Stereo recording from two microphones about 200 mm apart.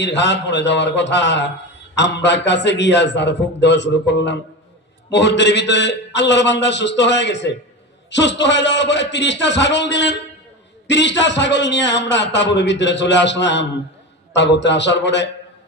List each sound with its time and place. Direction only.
0.0 s a man's voice: 60° left (ahead or behind)